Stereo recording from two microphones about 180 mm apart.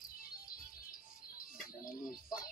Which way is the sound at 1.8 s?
20° left (ahead or behind).